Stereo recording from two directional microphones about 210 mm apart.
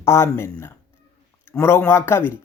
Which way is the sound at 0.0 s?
15° left (ahead or behind).